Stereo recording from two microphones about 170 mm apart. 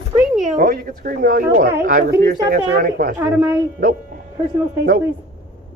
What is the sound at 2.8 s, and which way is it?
Speech, 55° right (ahead or behind).